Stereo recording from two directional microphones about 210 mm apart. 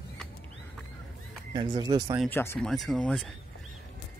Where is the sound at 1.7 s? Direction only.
20° right (ahead or behind).